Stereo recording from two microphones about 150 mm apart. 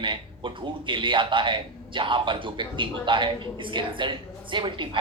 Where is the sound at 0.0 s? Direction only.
35° right (ahead or behind).